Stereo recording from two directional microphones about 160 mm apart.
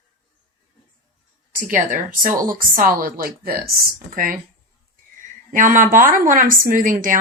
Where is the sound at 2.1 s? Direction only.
55° right (ahead or behind).